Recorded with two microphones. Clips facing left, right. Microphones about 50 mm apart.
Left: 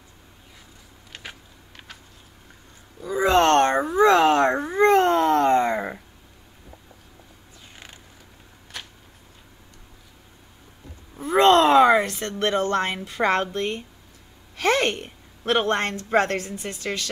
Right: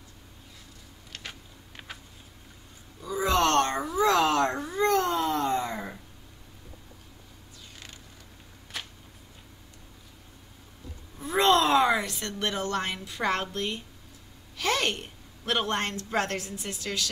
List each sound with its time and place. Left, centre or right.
1.1 s vehicle: centre
3.2 s a sound: left
11.3 s a woman's voice: left